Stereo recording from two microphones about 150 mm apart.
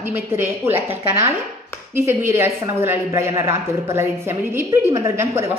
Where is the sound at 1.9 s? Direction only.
15° right (ahead or behind).